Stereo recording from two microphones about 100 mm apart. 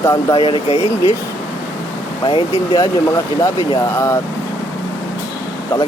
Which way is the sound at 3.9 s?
30° left (ahead or behind).